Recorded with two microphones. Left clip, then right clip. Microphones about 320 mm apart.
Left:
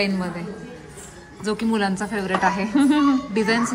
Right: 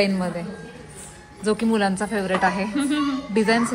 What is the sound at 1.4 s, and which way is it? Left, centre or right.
Speech, centre.